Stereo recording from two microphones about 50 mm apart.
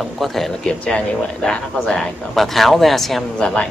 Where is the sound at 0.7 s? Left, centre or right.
Centre.